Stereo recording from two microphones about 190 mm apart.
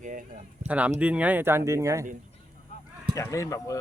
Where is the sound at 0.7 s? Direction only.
5° right (ahead or behind).